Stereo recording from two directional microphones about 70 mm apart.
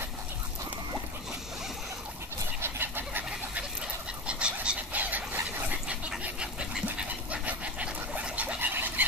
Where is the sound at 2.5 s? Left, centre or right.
Right.